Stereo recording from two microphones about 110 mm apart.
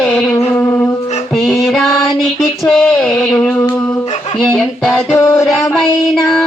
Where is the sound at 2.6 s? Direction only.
5° left (ahead or behind).